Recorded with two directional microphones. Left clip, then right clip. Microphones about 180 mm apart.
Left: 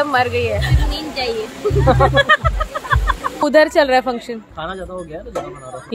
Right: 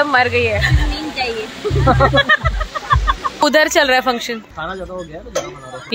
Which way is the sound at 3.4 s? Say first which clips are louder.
Left 1 dB; 5° left (ahead or behind).